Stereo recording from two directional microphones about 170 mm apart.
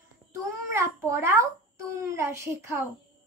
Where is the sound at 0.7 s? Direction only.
15° right (ahead or behind).